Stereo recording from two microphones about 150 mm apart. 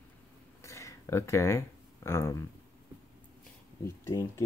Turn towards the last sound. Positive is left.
turn(degrees=20)  # may be behind; listen again after turning